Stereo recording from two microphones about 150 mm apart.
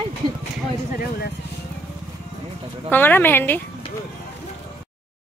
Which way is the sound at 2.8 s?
10° left (ahead or behind).